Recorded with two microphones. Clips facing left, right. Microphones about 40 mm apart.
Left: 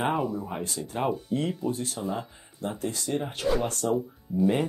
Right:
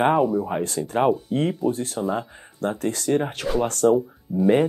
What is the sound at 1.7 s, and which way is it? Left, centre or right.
Speech, right.